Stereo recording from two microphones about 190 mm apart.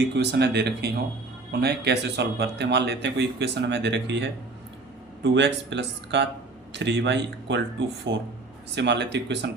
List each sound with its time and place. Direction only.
0.1 s speech: 60° right (ahead or behind)